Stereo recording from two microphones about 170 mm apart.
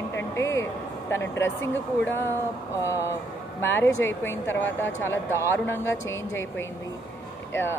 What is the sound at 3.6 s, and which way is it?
Speech, 15° left (ahead or behind).